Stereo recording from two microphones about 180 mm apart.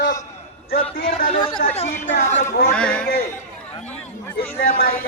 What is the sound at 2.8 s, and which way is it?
Speech, 5° left (ahead or behind).